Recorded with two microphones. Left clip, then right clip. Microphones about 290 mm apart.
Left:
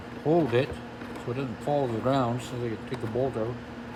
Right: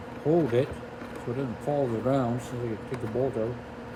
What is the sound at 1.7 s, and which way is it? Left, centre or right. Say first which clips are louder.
Speech: left 1 dB; left.